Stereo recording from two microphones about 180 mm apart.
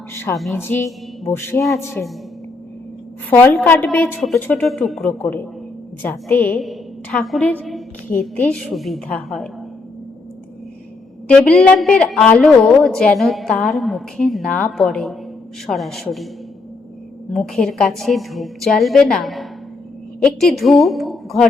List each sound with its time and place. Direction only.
0.1 s a woman's voice: 15° left (ahead or behind)
3.2 s a woman's voice: 10° left (ahead or behind)
11.3 s a woman's voice: 5° left (ahead or behind)
17.3 s a woman's voice: 5° left (ahead or behind)